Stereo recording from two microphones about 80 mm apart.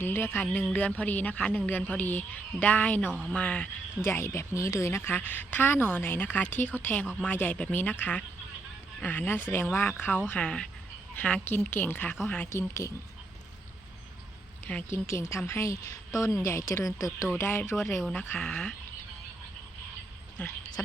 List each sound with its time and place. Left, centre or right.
0.0 s a woman's voice: left
3.1 s speech: centre
3.3 s speech: centre
4.0 s a woman's voice: left
12.5 s speech: left
14.8 s speech: left
17.3 s speech: left
17.7 s speech: centre
18.1 s speech: centre
20.4 s a woman's voice: left
20.8 s speech: left